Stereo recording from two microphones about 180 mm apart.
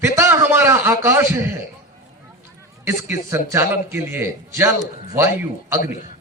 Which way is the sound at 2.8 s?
15° right (ahead or behind).